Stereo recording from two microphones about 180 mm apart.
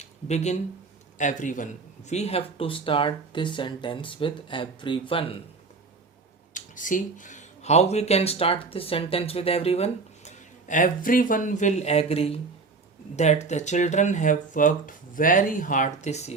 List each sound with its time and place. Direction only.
0.0 s speech: 40° left (ahead or behind)
6.5 s speech: 45° left (ahead or behind)